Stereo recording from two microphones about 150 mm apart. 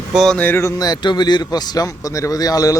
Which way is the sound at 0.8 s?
30° left (ahead or behind).